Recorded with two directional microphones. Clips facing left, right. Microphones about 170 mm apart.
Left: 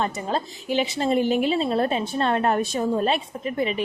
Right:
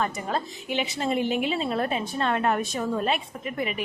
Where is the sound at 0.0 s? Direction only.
30° left (ahead or behind).